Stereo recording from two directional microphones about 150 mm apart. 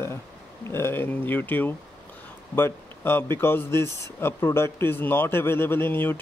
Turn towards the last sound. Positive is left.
turn(degrees=15)  # may be behind; listen again after turning